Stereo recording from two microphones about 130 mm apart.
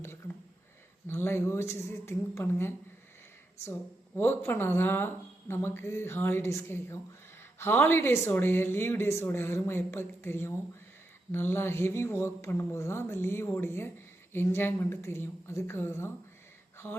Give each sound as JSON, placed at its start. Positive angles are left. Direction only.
{"t": 1.0, "sound": "speech", "side_deg": 20}
{"t": 4.2, "sound": "speech", "side_deg": 20}